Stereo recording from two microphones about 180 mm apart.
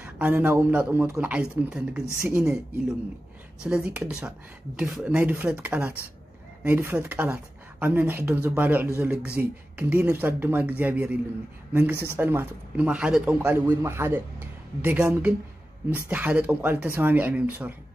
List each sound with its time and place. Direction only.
0.0 s speech: 10° right (ahead or behind)
3.6 s speech: 5° right (ahead or behind)